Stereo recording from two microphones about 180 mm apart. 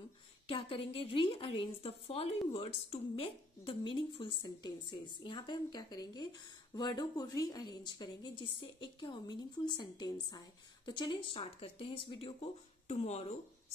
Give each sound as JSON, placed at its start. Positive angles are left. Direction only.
{"t": 0.5, "sound": "a woman's voice", "side_deg": 30}